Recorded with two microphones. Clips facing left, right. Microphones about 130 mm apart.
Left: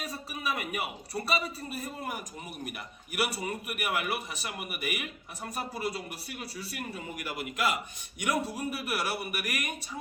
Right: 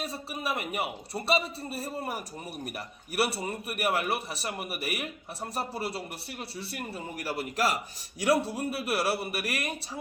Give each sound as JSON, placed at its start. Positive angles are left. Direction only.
{"t": 0.0, "sound": "a man's voice", "side_deg": -30}